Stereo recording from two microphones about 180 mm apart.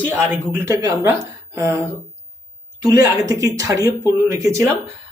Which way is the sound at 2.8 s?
20° right (ahead or behind).